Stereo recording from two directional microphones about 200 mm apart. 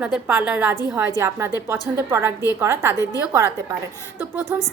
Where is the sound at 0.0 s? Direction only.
10° right (ahead or behind).